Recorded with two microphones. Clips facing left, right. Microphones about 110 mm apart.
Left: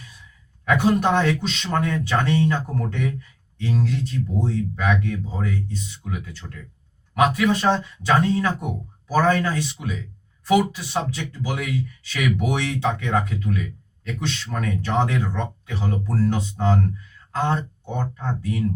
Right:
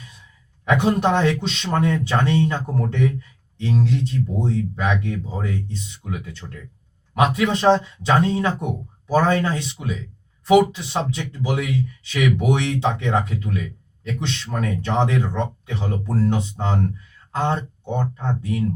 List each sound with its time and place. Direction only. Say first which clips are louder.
0.6 s speech: even; 25° right (ahead or behind)
6.4 s speech: right 2 dB; centre (ahead or behind)
7.1 s speech: even; 25° right (ahead or behind)